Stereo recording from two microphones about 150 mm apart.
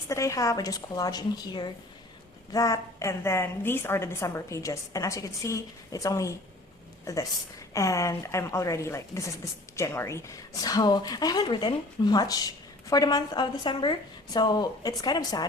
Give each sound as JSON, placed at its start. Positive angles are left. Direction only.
{"t": 0.1, "sound": "speech", "side_deg": 20}